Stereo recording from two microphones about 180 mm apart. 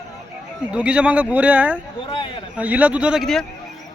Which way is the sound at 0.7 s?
5° right (ahead or behind).